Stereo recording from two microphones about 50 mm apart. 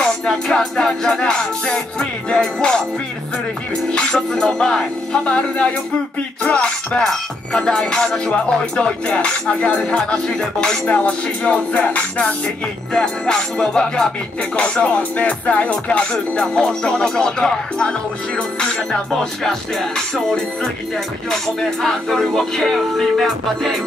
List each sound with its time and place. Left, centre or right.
0.0 s music: centre
3.9 s music: centre
12.9 s music: centre